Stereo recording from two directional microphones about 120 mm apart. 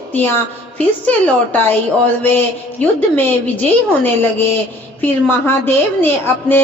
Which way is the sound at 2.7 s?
10° left (ahead or behind).